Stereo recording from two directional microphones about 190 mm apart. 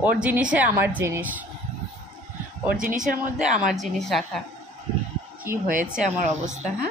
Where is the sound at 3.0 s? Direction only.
45° right (ahead or behind).